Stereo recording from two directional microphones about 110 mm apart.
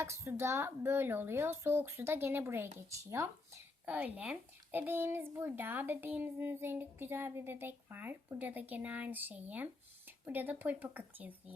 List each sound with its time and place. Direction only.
0.0 s speech: 25° right (ahead or behind)
3.8 s a child's voice: 15° right (ahead or behind)